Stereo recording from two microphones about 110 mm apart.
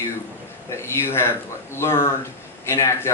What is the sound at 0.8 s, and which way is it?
Speech, 25° left (ahead or behind).